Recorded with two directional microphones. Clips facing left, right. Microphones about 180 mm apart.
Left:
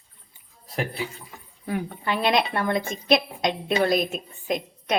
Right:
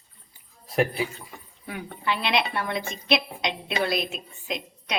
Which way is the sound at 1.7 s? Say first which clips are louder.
Left 3 dB; 45° left (ahead or behind).